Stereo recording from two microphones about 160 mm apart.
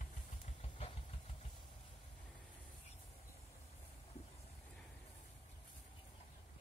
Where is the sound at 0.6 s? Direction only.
35° left (ahead or behind).